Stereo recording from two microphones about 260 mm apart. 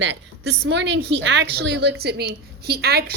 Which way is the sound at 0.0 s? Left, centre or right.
Right.